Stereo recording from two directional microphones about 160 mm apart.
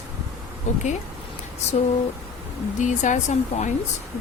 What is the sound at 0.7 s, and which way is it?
Speech, 45° left (ahead or behind).